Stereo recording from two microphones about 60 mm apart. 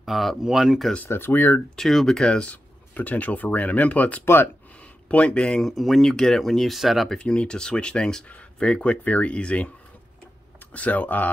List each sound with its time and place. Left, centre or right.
0.0 s speech: centre
1.0 s speech: left
1.8 s speech: centre
2.2 s speech: centre
5.7 s speech: centre
7.2 s speech: centre
10.7 s speech: left